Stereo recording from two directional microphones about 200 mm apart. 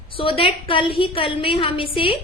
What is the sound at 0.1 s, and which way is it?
A woman's voice, 25° left (ahead or behind).